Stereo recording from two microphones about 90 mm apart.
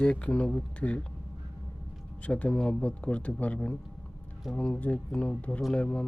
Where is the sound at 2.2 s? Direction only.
15° left (ahead or behind).